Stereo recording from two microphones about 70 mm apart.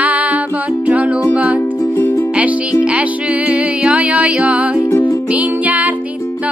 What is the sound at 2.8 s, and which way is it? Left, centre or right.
Music, centre.